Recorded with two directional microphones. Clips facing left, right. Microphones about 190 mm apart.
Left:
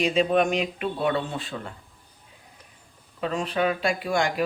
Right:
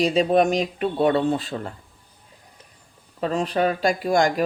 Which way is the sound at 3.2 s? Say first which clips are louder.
Right 3 dB; 40° right (ahead or behind).